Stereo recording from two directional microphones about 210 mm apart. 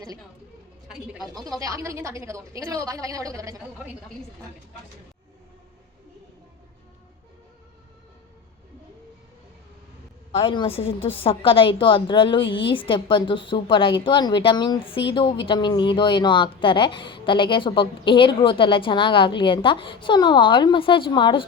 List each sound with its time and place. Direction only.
1.4 s a woman's voice: 15° right (ahead or behind)
10.3 s a woman's voice: 25° left (ahead or behind)